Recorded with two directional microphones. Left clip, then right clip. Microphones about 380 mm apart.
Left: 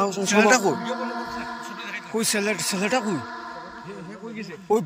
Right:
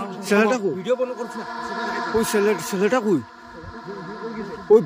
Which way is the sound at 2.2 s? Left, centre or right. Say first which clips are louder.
Right 2 dB; centre.